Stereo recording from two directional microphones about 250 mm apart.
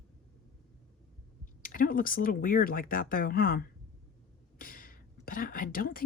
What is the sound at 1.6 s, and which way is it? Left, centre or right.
Speech, left.